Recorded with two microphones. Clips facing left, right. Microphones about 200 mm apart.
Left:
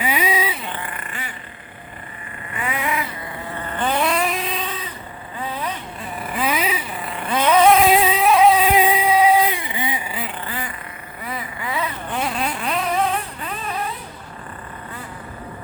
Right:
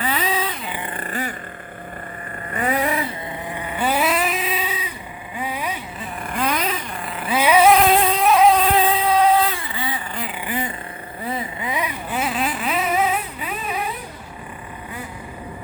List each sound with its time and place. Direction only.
0.0 s vehicle: 10° left (ahead or behind)
0.9 s vehicle: 40° right (ahead or behind)
2.5 s vehicle: 40° right (ahead or behind)
3.5 s cat: 10° right (ahead or behind)
5.4 s vehicle: 10° right (ahead or behind)
6.1 s vehicle: 5° left (ahead or behind)
10.4 s vehicle: 20° right (ahead or behind)
12.1 s vehicle: 5° right (ahead or behind)